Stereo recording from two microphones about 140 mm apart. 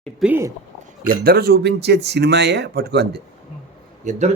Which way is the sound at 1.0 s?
90° right.